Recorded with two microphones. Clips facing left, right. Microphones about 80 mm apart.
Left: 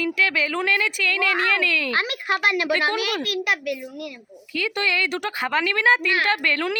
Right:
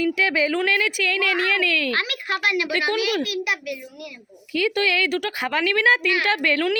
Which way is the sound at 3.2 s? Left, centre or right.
Left.